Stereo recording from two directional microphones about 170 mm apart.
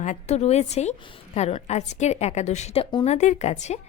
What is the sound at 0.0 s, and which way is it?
A woman's voice, 45° left (ahead or behind).